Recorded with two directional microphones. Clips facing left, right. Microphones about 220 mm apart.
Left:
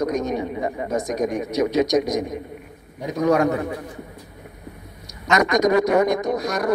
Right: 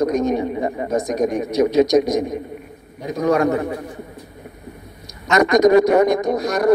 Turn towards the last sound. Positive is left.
turn(degrees=-30)  # may be behind; listen again after turning